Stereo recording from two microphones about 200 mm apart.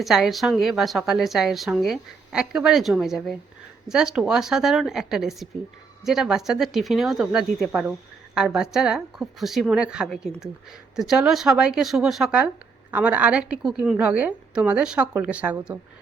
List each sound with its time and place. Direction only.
0.0 s a woman's voice: centre (ahead or behind)